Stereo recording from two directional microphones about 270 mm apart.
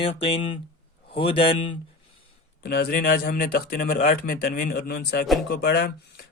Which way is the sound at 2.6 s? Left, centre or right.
Left.